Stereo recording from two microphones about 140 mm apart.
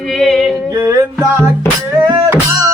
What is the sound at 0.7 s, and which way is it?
Music, 20° right (ahead or behind).